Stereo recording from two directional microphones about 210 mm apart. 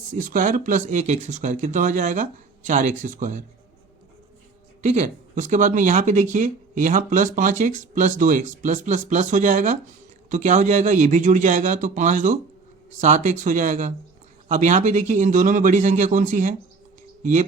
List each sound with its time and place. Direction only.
0.1 s speech: 40° right (ahead or behind)
4.8 s speech: 35° right (ahead or behind)